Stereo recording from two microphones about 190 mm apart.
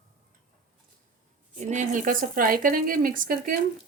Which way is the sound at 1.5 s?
40° right (ahead or behind).